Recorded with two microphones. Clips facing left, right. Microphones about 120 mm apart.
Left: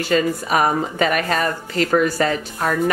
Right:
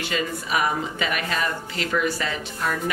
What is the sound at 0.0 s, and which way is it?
Speech, 45° left (ahead or behind).